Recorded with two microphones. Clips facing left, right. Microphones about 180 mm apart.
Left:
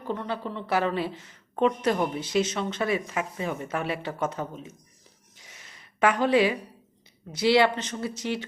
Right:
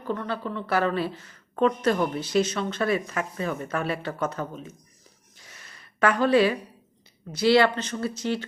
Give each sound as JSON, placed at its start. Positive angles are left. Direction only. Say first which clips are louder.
{"t": 0.0, "sound": "a woman's voice", "louder": "right 1 dB", "side_deg": 20}
{"t": 5.4, "sound": "a sound", "louder": "right 1 dB", "side_deg": 20}
{"t": 7.3, "sound": "speech", "louder": "right 1 dB", "side_deg": 20}